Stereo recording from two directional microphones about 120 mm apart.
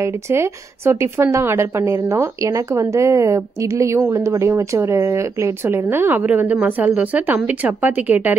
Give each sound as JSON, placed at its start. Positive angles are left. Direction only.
{"t": 0.0, "sound": "a woman's voice", "side_deg": -20}